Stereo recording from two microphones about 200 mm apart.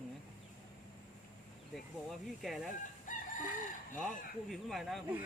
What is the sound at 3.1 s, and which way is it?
Chicken, 40° left (ahead or behind).